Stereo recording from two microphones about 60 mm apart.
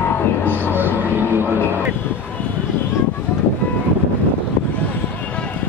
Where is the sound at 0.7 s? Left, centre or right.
Right.